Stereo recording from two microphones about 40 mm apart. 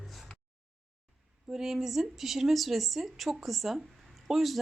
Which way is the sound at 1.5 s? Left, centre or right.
Centre.